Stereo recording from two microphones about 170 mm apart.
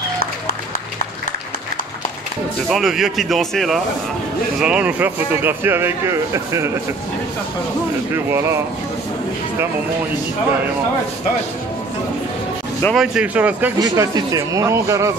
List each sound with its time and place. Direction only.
2.7 s speech: centre (ahead or behind); by 6.7 s 15° right (ahead or behind)
8.1 s speech: 15° right (ahead or behind)
12.8 s speech: centre (ahead or behind)
13.7 s speech: 25° right (ahead or behind)